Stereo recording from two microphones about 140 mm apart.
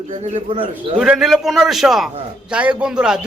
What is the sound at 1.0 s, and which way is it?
A man's voice, 5° right (ahead or behind).